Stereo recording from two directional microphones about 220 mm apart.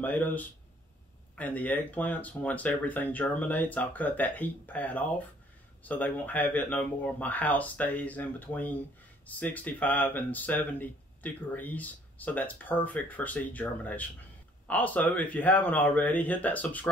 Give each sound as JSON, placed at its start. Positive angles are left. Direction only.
{"t": 0.0, "sound": "speech", "side_deg": 10}